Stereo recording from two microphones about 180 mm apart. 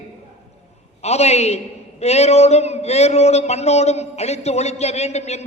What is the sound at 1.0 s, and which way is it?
A man's voice, 35° left (ahead or behind).